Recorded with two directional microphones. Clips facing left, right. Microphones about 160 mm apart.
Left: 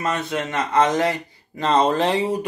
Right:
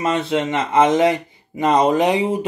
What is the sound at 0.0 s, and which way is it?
Speech, 25° right (ahead or behind).